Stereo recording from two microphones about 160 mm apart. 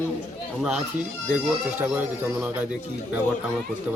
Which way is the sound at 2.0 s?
10° right (ahead or behind).